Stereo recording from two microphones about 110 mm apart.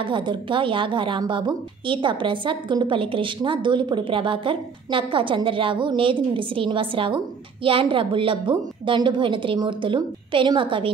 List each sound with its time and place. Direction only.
0.0 s a woman's voice: 45° right (ahead or behind)